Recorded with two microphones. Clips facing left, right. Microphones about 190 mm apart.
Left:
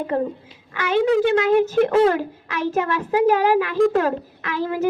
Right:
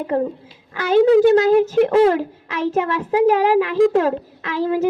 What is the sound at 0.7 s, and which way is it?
A woman's voice, 35° right (ahead or behind).